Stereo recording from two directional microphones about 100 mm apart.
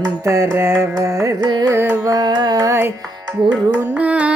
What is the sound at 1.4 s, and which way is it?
Carnatic music, 45° right (ahead or behind).